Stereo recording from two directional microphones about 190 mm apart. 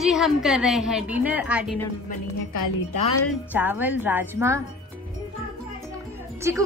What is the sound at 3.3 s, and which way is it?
A woman's voice, 10° right (ahead or behind).